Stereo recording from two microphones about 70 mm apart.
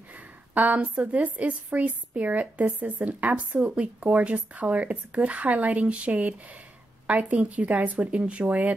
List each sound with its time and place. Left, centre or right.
0.1 s a woman's voice: right